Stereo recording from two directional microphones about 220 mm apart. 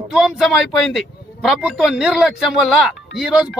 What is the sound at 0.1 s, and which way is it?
A man's voice, centre (ahead or behind).